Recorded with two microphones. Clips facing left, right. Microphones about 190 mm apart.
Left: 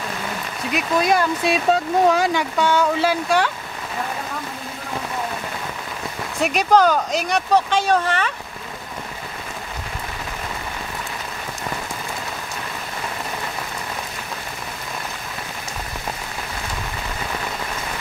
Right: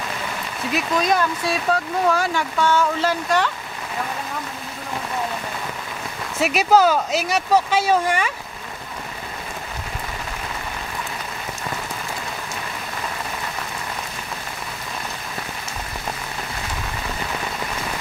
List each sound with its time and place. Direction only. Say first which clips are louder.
0.7 s speech: left 2 dB; 5° left (ahead or behind)
1.4 s speech: left 3 dB; 20° left (ahead or behind)
6.4 s speech: even; 5° right (ahead or behind)